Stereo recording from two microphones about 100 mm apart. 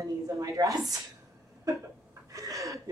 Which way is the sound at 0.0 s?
35° right (ahead or behind).